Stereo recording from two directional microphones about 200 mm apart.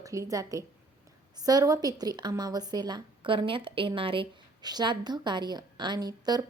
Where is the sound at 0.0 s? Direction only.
15° right (ahead or behind).